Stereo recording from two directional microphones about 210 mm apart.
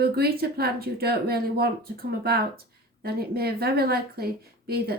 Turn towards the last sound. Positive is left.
turn(degrees=-45)  # may be behind; listen again after turning